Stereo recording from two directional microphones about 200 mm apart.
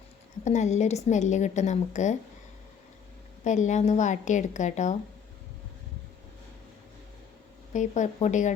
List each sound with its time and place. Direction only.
0.4 s a woman's voice: 35° left (ahead or behind)
3.4 s a woman's voice: 35° left (ahead or behind)
7.7 s a woman's voice: 40° left (ahead or behind)